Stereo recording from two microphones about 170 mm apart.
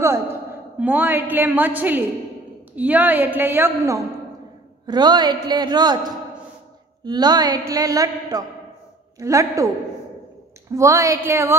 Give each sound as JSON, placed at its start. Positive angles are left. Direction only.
{"t": 0.7, "sound": "a woman's voice", "side_deg": -10}
{"t": 4.8, "sound": "speech", "side_deg": -25}
{"t": 10.7, "sound": "speech", "side_deg": -20}